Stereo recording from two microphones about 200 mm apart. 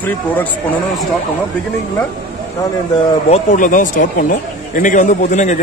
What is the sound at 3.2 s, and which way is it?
A man's voice, 35° left (ahead or behind).